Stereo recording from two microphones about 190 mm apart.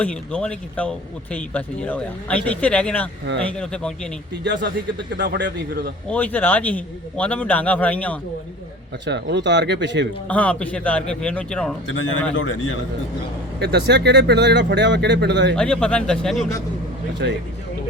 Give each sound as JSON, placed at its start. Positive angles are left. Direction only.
{"t": 0.0, "sound": "speech", "side_deg": 5}
{"t": 4.4, "sound": "speech", "side_deg": -60}
{"t": 6.1, "sound": "speech", "side_deg": 10}
{"t": 9.0, "sound": "speech", "side_deg": -65}
{"t": 10.2, "sound": "speech", "side_deg": 5}
{"t": 12.3, "sound": "a man's voice", "side_deg": 90}
{"t": 13.6, "sound": "speech", "side_deg": -65}
{"t": 15.5, "sound": "speech", "side_deg": 5}
{"t": 17.2, "sound": "speech", "side_deg": -65}